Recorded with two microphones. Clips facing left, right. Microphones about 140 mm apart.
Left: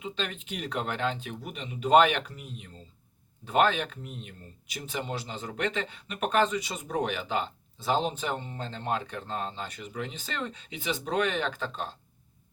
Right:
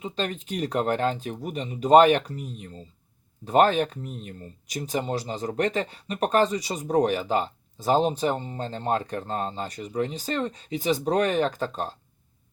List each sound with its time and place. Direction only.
0.0 s speech: 40° right (ahead or behind)